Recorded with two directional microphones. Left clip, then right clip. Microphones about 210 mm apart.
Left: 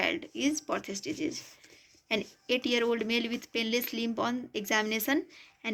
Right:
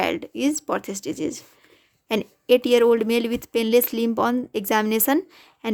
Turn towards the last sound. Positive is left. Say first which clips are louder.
# right 7 dB
turn(degrees=-50)  # may be behind; listen again after turning